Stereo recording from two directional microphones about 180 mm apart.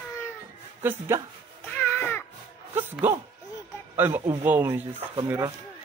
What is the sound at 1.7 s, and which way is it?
Baby cry, 10° left (ahead or behind).